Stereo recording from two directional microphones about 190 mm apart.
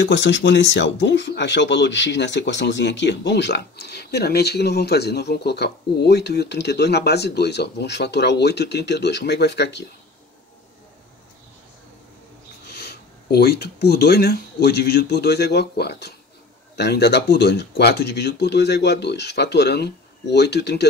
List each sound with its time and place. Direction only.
0.0 s speech: 70° left (ahead or behind)
12.7 s speech: 60° left (ahead or behind)